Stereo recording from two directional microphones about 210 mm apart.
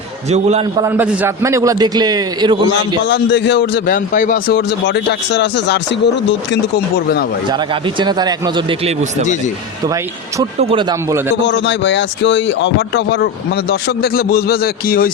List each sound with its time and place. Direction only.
0.3 s a man's voice: 30° right (ahead or behind)
0.8 s a man's voice: 10° right (ahead or behind)
3.1 s a man's voice: 55° left (ahead or behind)
3.9 s speech: 40° left (ahead or behind)
7.9 s a man's voice: 20° right (ahead or behind)
10.6 s a man's voice: 25° right (ahead or behind)
11.4 s a man's voice: 60° left (ahead or behind)